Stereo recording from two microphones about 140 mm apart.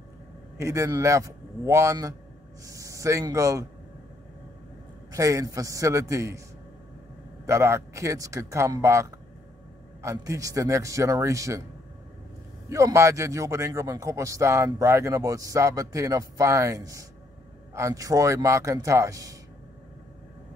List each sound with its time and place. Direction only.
0.6 s a man's voice: 20° right (ahead or behind)
5.1 s a man's voice: 25° right (ahead or behind)
7.4 s a man's voice: 20° right (ahead or behind)
12.6 s a man's voice: 20° right (ahead or behind)